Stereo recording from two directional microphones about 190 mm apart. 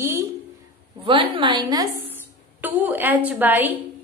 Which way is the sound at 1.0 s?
25° right (ahead or behind).